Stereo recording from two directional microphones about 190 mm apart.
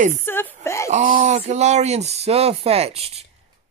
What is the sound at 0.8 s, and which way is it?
Speech, 40° right (ahead or behind).